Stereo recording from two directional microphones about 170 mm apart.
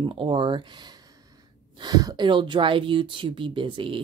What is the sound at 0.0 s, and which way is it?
Speech, 30° right (ahead or behind).